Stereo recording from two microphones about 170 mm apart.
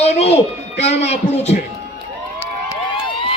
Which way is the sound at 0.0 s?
40° left (ahead or behind).